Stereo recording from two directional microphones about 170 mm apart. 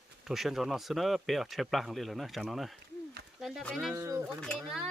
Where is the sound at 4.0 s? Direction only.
15° right (ahead or behind).